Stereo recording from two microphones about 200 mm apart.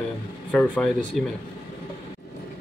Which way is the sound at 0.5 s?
5° left (ahead or behind).